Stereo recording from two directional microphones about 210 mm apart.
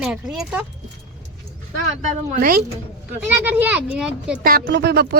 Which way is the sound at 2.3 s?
45° right (ahead or behind).